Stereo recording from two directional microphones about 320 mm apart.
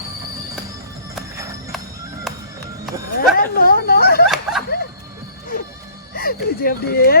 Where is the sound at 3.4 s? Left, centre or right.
Left.